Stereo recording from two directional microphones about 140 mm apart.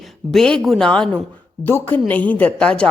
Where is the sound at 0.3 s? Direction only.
5° left (ahead or behind).